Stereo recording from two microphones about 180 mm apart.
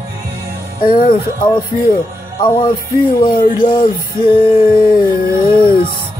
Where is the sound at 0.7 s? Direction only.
50° left (ahead or behind).